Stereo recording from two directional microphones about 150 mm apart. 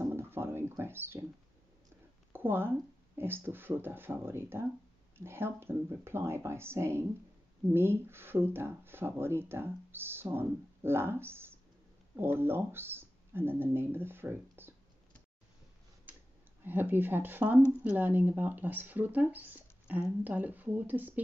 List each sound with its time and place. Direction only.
0.0 s a sound: 15° right (ahead or behind)
2.3 s speech: 15° right (ahead or behind)
16.1 s clicking: 10° right (ahead or behind)
16.6 s speech: 15° right (ahead or behind)